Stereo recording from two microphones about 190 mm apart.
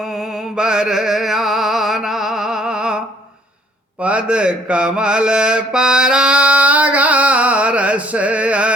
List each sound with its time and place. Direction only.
0.0 s music: centre (ahead or behind)
4.0 s mantra: 5° right (ahead or behind)